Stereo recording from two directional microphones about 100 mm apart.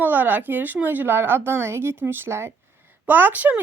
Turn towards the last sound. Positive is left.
turn(degrees=-15)  # may be behind; listen again after turning